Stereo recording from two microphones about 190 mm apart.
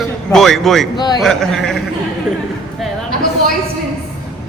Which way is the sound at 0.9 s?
20° left (ahead or behind).